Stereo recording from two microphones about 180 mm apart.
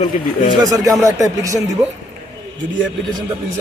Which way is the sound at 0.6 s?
20° right (ahead or behind).